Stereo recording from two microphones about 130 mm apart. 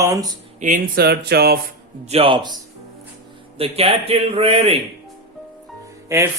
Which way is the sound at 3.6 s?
50° right (ahead or behind).